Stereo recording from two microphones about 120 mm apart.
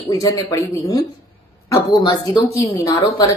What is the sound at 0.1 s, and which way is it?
A woman's voice, 25° left (ahead or behind).